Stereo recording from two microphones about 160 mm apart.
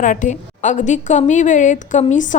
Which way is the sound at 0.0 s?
55° left (ahead or behind).